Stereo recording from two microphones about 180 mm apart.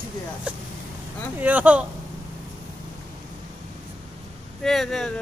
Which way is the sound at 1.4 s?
10° right (ahead or behind).